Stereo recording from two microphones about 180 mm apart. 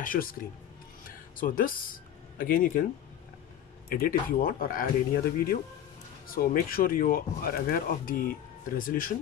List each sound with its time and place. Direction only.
0.0 s speech: 50° left (ahead or behind)
1.0 s music: 50° left (ahead or behind)
2.3 s speech: 50° left (ahead or behind)
3.9 s speech: 55° left (ahead or behind)